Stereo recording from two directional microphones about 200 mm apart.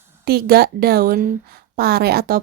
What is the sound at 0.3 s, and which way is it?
Speech, 50° right (ahead or behind).